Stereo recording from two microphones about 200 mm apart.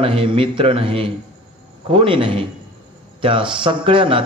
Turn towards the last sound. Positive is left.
turn(degrees=-25)  # may be behind; listen again after turning